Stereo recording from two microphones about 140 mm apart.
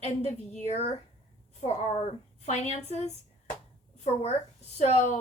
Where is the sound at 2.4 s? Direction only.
55° left (ahead or behind).